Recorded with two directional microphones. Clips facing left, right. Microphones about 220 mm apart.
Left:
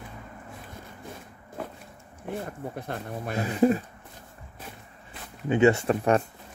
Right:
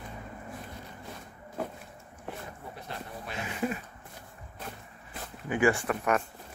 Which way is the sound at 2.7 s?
55° left (ahead or behind).